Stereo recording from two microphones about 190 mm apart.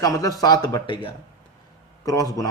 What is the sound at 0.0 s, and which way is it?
A man's voice, 20° left (ahead or behind).